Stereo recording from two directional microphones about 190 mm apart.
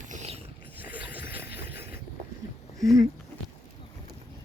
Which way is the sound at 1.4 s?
55° left (ahead or behind).